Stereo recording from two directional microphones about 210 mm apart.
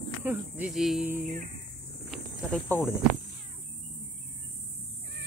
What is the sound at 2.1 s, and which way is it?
Speech, 10° left (ahead or behind).